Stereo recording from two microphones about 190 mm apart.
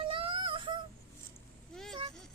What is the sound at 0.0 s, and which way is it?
Synthetic singing, 30° right (ahead or behind).